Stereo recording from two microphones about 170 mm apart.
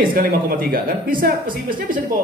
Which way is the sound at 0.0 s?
55° right (ahead or behind).